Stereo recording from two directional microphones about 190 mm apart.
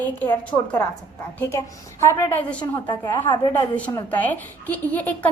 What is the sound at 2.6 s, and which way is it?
A woman's voice, 25° left (ahead or behind).